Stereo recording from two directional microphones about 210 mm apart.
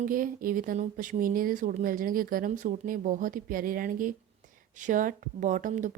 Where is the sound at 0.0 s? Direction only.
40° right (ahead or behind).